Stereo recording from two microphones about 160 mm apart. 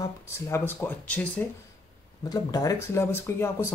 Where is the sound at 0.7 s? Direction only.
10° left (ahead or behind).